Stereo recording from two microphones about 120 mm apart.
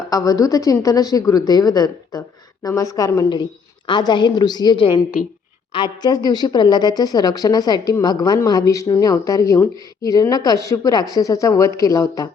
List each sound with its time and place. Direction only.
0.1 s a woman's voice: 30° left (ahead or behind)